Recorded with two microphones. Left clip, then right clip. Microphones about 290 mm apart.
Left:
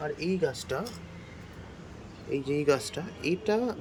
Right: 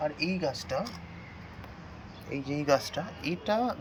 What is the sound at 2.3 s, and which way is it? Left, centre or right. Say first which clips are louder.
Speech: left 1 dB; centre.